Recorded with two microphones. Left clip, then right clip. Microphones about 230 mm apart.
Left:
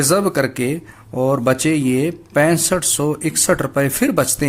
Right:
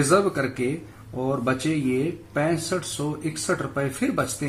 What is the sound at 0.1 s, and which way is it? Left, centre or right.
Speech, left.